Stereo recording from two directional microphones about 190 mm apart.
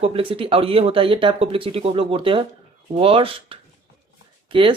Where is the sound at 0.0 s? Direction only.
30° right (ahead or behind).